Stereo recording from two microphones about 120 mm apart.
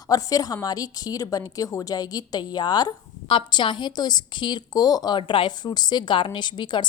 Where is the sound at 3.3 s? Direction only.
45° left (ahead or behind).